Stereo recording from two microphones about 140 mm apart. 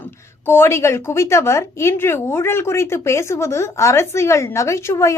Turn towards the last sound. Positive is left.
turn(degrees=20)  # may be behind; listen again after turning